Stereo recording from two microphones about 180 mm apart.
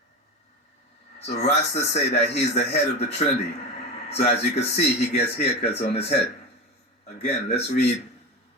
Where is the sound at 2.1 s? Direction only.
40° left (ahead or behind).